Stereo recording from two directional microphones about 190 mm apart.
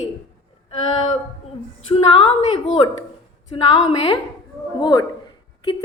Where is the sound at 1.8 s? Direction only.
30° left (ahead or behind).